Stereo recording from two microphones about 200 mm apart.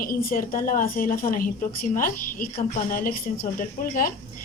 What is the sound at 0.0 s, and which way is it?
A woman's voice, 45° left (ahead or behind).